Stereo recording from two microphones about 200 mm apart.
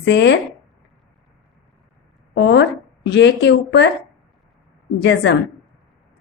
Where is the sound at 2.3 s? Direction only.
60° left (ahead or behind).